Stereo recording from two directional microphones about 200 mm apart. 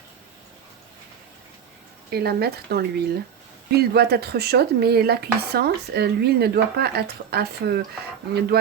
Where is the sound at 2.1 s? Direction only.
50° right (ahead or behind).